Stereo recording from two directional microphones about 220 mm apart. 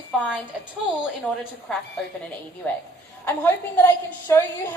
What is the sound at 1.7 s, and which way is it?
A woman's voice, 5° left (ahead or behind).